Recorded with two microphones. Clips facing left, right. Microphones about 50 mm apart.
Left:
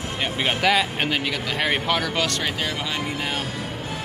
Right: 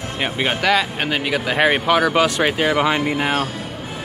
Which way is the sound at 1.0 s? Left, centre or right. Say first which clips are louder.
Right 4 dB; centre.